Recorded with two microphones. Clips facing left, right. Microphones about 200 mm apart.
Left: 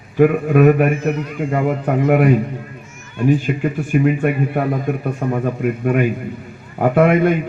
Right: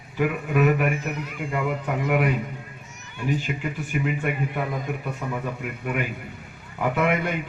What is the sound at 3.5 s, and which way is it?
A man's voice, 55° left (ahead or behind).